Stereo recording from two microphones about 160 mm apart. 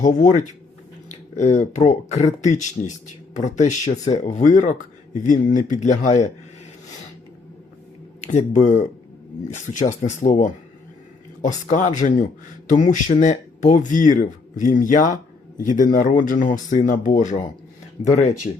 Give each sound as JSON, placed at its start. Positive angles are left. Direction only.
{"t": 0.2, "sound": "speech", "side_deg": 50}
{"t": 8.3, "sound": "speech", "side_deg": 50}
{"t": 11.6, "sound": "speech", "side_deg": 50}
{"t": 18.5, "sound": "speech", "side_deg": 45}